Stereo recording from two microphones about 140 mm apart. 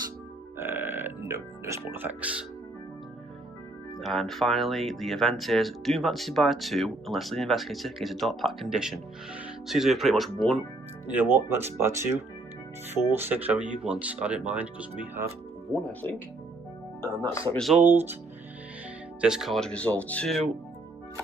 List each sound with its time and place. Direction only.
0.5 s burping: 15° right (ahead or behind)
4.0 s speech: centre (ahead or behind)
11.1 s speech: 15° right (ahead or behind)
15.7 s speech: 10° left (ahead or behind)
17.5 s speech: centre (ahead or behind)
17.7 s speech: 15° right (ahead or behind)
19.2 s speech: 5° right (ahead or behind)